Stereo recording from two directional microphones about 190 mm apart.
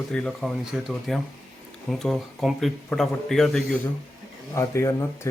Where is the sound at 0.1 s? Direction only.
5° left (ahead or behind).